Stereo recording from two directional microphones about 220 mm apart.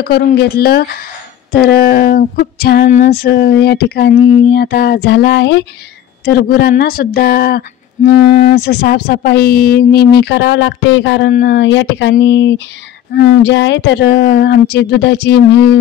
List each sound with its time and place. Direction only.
0.0 s speech: 45° left (ahead or behind)